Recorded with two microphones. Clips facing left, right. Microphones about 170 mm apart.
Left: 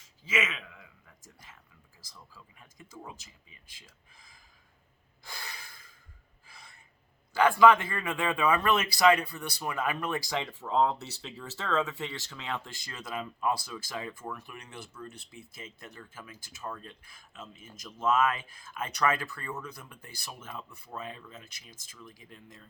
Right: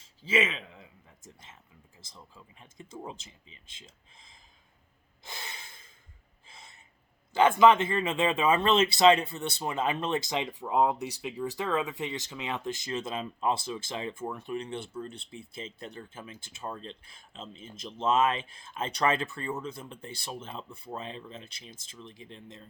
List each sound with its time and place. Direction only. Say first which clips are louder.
0.0 s a sound: right 5 dB; 30° right (ahead or behind)
2.0 s speech: right 2 dB; 25° right (ahead or behind)
5.2 s snort: right 1 dB; 20° right (ahead or behind)
6.4 s gasp: right 1 dB; 25° right (ahead or behind)
7.3 s speech: right 1 dB; 20° right (ahead or behind)